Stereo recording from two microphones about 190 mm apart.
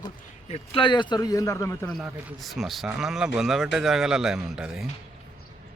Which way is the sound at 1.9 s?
Centre (ahead or behind).